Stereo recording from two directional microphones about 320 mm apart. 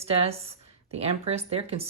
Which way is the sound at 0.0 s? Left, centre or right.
Centre.